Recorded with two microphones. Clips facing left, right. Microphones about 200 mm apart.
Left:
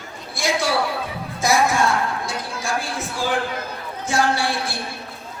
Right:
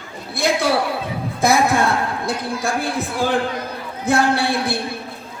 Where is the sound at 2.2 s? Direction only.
60° right (ahead or behind).